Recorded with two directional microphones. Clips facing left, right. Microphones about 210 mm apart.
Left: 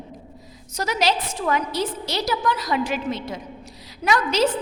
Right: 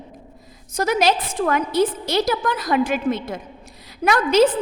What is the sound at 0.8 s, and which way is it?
A woman's voice, 50° right (ahead or behind).